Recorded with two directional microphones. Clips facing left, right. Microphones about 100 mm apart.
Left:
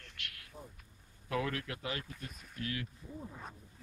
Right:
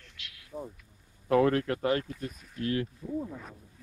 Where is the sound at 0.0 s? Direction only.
55° left (ahead or behind).